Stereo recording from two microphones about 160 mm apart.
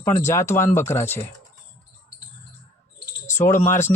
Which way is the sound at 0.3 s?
15° left (ahead or behind).